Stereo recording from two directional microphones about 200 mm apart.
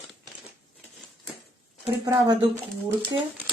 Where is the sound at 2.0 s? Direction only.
20° right (ahead or behind).